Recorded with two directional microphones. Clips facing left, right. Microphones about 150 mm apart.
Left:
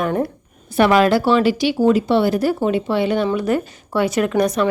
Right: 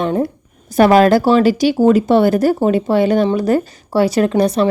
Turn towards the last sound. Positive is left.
turn(degrees=-30)  # may be behind; listen again after turning